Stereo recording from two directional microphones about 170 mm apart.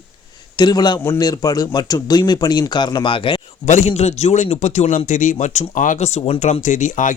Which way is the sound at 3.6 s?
45° left (ahead or behind).